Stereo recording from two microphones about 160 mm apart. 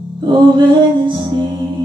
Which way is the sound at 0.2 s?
30° right (ahead or behind).